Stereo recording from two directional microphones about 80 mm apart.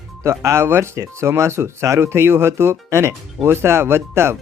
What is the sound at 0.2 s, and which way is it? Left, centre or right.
Speech, right.